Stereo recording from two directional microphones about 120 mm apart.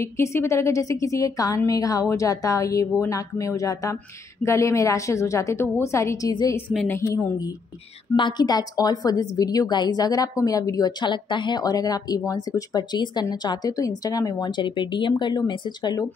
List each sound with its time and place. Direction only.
0.0 s a woman's voice: 20° left (ahead or behind)